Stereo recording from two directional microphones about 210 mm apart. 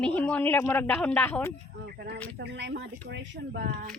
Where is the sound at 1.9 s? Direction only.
50° right (ahead or behind).